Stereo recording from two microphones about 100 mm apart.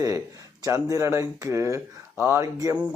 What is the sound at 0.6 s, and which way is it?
Speech, 35° right (ahead or behind).